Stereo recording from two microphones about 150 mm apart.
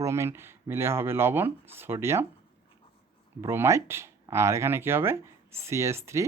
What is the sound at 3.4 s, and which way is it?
Speech, 20° right (ahead or behind).